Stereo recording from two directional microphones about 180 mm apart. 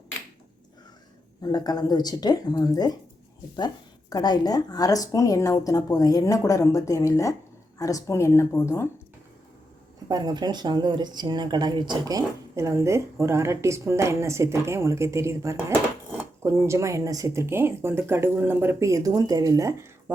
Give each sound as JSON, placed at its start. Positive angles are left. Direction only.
{"t": 1.4, "sound": "speech", "side_deg": 20}
{"t": 4.1, "sound": "speech", "side_deg": 20}
{"t": 10.1, "sound": "speech", "side_deg": -20}